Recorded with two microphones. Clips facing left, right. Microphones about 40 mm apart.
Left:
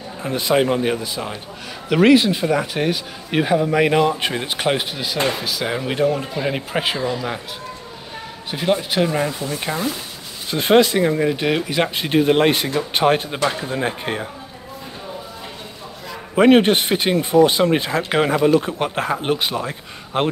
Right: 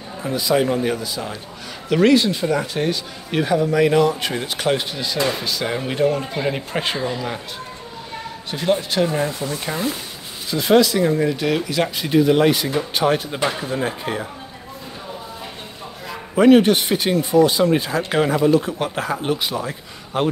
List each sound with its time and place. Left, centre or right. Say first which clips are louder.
0.2 s speech: left 1 dB; left
1.9 s speech: left 2 dB; left; by 7.2 s centre
8.5 s a man's voice: even; centre
9.7 s speech: left 1 dB; centre
10.5 s speech: left 1 dB; left
11.1 s speech: even; left
16.3 s speech: even; left